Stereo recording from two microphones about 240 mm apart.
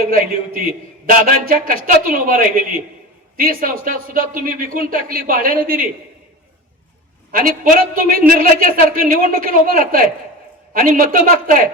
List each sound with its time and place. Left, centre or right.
0.0 s speech: right
7.3 s speech: right